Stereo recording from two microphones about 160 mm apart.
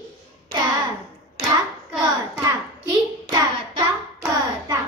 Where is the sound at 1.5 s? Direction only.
20° right (ahead or behind).